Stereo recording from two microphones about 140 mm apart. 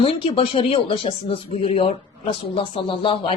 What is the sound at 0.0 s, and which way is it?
Speech, 40° left (ahead or behind).